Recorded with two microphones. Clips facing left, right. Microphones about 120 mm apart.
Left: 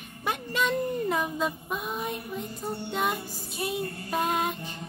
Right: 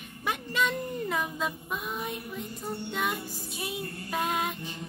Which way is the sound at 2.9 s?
45° left (ahead or behind).